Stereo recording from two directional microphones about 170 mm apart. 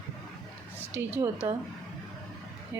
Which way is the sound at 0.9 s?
15° right (ahead or behind).